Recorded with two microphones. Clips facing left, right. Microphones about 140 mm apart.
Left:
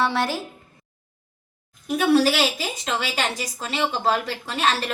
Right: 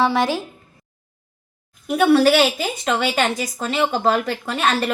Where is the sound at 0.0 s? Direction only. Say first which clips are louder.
Right 4 dB; 15° right (ahead or behind).